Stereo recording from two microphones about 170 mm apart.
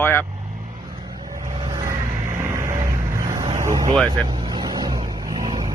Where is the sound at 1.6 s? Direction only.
25° right (ahead or behind).